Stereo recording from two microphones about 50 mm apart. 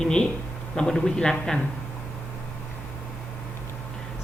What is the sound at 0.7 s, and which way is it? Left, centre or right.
Speech, centre.